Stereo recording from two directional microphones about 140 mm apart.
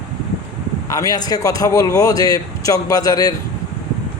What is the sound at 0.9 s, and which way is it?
A man's voice, 25° left (ahead or behind).